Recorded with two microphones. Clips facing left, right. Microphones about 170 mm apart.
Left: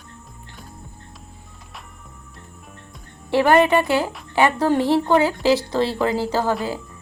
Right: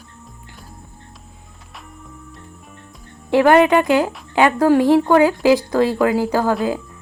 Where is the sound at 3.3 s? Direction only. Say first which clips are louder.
Right 3 dB; 15° right (ahead or behind).